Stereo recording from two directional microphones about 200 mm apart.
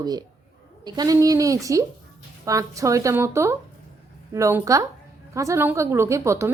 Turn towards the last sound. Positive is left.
turn(degrees=-15)  # may be behind; listen again after turning